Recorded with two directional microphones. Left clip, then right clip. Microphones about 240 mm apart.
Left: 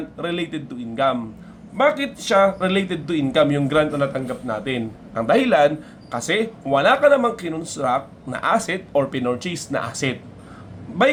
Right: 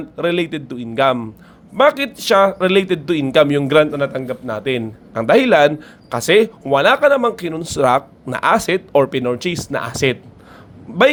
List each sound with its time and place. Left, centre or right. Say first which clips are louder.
0.2 s speech: right 8 dB; right